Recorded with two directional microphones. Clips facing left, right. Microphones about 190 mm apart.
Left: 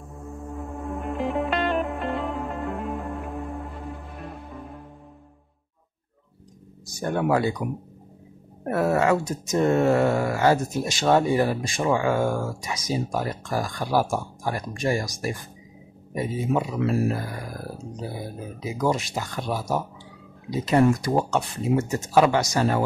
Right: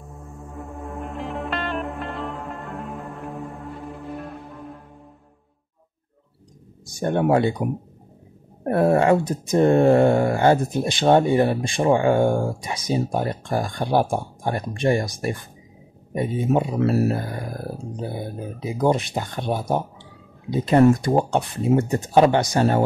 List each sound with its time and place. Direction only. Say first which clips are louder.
0.4 s music: left 1 dB; centre (ahead or behind)
6.9 s speech: right 4 dB; 25° right (ahead or behind)
8.6 s speech: right 4 dB; 30° right (ahead or behind)
16.4 s speech: right 4 dB; 35° right (ahead or behind)
17.1 s speech: right 3 dB; 25° right (ahead or behind)
20.8 s speech: right 6 dB; 50° right (ahead or behind)
21.1 s speech: right 3 dB; 30° right (ahead or behind)